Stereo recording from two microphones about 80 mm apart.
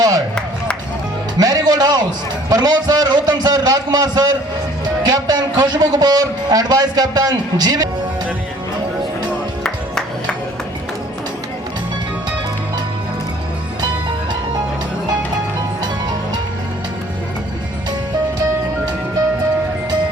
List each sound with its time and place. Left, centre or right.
1.4 s music: right
2.5 s a man's voice: right